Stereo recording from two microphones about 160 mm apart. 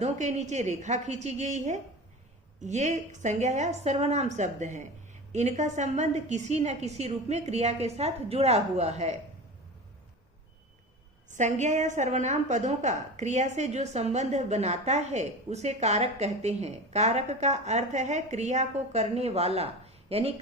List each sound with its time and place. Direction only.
0.0 s a woman's voice: 45° right (ahead or behind)
11.3 s a woman's voice: 50° right (ahead or behind)